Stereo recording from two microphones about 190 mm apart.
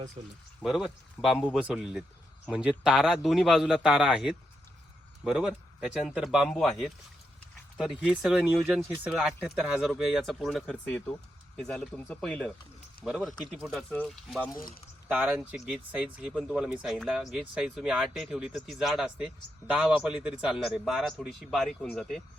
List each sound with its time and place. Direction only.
0.2 s speech: 30° right (ahead or behind)
0.6 s speech: 5° right (ahead or behind)
15.0 s speech: 10° right (ahead or behind)